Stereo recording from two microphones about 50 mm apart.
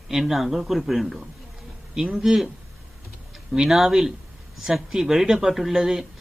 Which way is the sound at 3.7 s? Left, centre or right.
Centre.